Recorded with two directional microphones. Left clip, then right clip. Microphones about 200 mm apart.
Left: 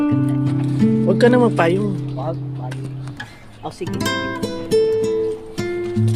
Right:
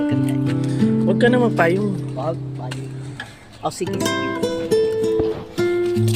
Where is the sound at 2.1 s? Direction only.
50° right (ahead or behind).